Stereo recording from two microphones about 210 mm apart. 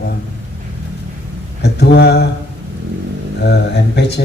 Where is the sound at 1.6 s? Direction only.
50° left (ahead or behind).